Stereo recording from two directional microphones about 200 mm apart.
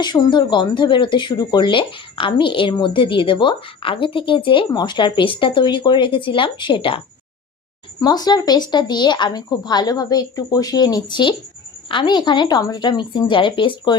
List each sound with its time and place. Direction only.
0.0 s speech: 20° left (ahead or behind)
8.0 s speech: 20° left (ahead or behind)